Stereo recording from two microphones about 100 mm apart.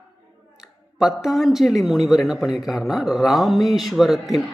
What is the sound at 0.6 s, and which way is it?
Speech, 5° right (ahead or behind).